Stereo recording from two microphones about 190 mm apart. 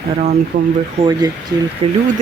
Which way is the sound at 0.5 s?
45° right (ahead or behind).